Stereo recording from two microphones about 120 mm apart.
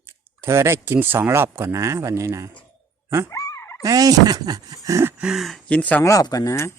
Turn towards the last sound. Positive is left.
turn(degrees=25)  # may be behind; listen again after turning